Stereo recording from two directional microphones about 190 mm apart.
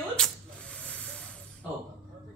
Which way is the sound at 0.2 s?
5° left (ahead or behind).